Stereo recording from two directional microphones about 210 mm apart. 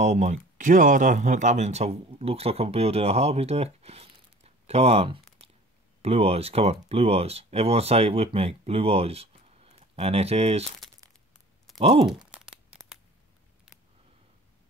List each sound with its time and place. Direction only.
0.0 s speech: 35° right (ahead or behind)
11.8 s speech: 30° right (ahead or behind)
12.4 s tearing: 5° right (ahead or behind)